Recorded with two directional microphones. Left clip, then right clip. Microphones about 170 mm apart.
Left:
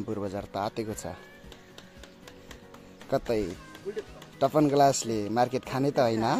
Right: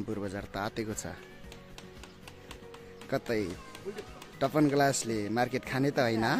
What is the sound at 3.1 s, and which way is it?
Speech, centre (ahead or behind).